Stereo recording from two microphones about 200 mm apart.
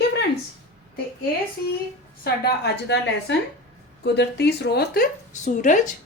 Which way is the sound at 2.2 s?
55° left (ahead or behind).